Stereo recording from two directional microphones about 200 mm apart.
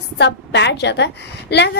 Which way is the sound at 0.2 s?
60° left (ahead or behind).